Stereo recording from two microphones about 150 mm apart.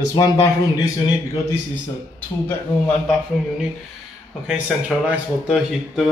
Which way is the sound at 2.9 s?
5° left (ahead or behind).